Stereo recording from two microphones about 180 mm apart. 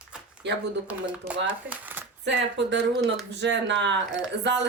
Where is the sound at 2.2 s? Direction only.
75° right (ahead or behind).